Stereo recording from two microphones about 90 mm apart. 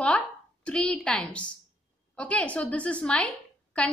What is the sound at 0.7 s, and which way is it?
A woman's voice, 10° left (ahead or behind).